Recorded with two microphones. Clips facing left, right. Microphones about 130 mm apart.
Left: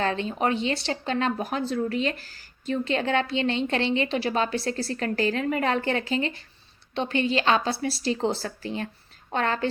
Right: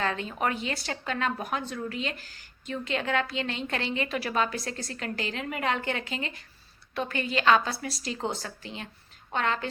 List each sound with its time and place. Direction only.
0.0 s speech: 30° left (ahead or behind)